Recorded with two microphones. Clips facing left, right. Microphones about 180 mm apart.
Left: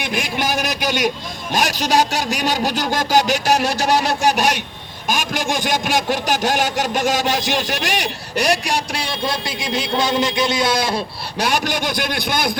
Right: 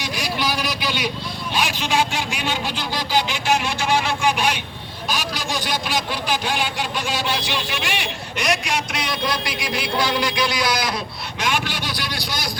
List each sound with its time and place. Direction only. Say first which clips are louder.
0.0 s vehicle: left 3 dB; 55° left (ahead or behind)
1.5 s a man's voice: left 5 dB; 40° left (ahead or behind)